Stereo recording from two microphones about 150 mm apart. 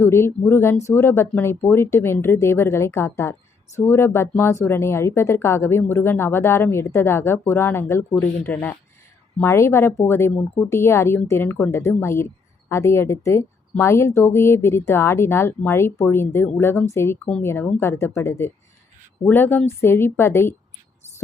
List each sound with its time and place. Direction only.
0.0 s a woman's voice: 15° left (ahead or behind)